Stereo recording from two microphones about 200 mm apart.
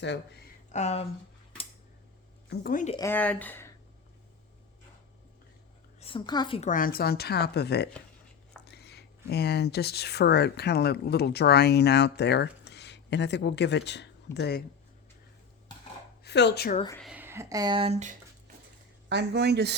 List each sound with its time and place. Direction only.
0.7 s speech: 35° left (ahead or behind)
2.5 s speech: 45° left (ahead or behind)
3.0 s speech: 10° left (ahead or behind)
6.0 s a woman's voice: 25° left (ahead or behind)
6.6 s speech: 40° left (ahead or behind)
16.2 s speech: 60° left (ahead or behind)
17.0 s speech: 5° right (ahead or behind); by 18.2 s 35° right (ahead or behind)
19.0 s speech: 60° right (ahead or behind)